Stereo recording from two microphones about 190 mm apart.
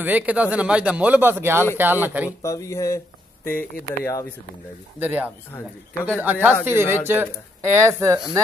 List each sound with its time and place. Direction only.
0.0 s speech: 10° right (ahead or behind)
2.4 s speech: 15° left (ahead or behind)
4.9 s speech: 10° right (ahead or behind)
5.5 s speech: 15° left (ahead or behind)
6.0 s speech: 10° right (ahead or behind)